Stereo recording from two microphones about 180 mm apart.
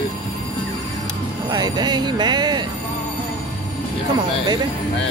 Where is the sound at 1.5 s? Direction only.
20° right (ahead or behind).